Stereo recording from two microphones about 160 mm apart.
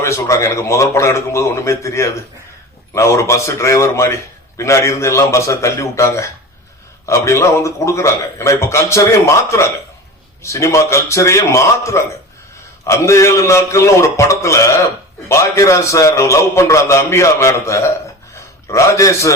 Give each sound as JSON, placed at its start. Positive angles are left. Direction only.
{"t": 0.0, "sound": "a man's voice", "side_deg": 20}